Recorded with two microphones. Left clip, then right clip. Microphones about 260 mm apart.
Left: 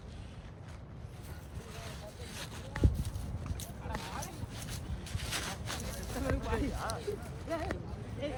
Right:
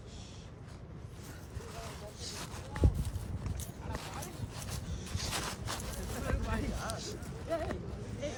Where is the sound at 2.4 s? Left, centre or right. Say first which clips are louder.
Left 1 dB; right.